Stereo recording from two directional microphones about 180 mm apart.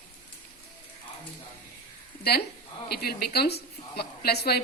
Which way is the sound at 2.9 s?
60° left (ahead or behind).